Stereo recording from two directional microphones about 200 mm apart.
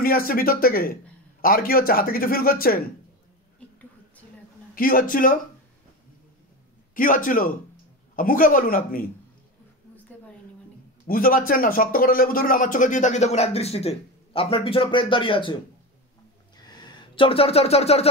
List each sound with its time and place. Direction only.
0.0 s speech: 45° left (ahead or behind)
4.7 s speech: 45° left (ahead or behind)
6.9 s speech: 45° left (ahead or behind)
11.1 s a man's voice: 45° left (ahead or behind); by 15.5 s 25° left (ahead or behind)
16.5 s a sound: 20° left (ahead or behind)